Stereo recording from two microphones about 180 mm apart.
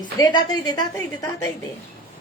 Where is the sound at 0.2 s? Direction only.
20° left (ahead or behind).